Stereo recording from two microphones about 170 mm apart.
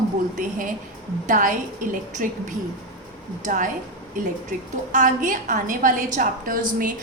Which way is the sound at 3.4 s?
50° right (ahead or behind).